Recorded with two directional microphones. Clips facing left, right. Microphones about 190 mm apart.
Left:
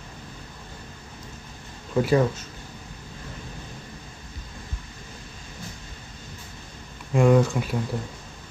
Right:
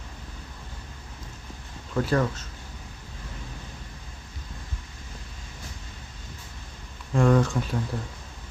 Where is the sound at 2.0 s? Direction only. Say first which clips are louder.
Left 4 dB; 10° left (ahead or behind).